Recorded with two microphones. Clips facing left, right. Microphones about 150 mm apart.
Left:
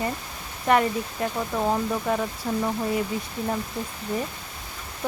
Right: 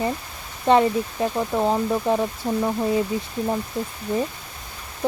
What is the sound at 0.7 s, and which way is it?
Speech, 25° right (ahead or behind).